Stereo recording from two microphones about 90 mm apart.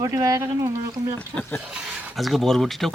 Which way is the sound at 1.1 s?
15° left (ahead or behind).